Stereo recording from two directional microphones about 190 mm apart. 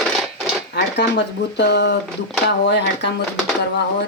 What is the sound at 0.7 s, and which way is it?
Speech, 65° left (ahead or behind).